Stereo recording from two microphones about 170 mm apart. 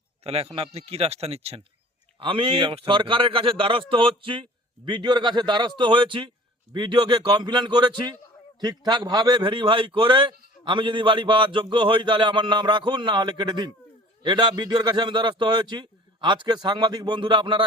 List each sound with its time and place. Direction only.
0.3 s a man's voice: 35° right (ahead or behind)